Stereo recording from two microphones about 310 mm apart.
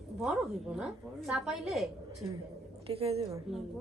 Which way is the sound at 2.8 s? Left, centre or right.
Centre.